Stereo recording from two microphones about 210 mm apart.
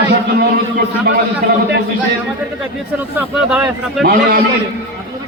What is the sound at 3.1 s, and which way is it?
Speech, 5° right (ahead or behind).